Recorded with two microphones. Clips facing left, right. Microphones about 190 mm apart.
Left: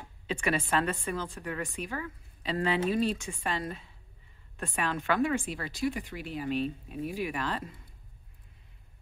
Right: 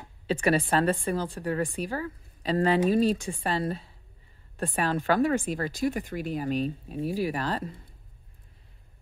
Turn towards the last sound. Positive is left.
turn(degrees=-35)  # may be behind; listen again after turning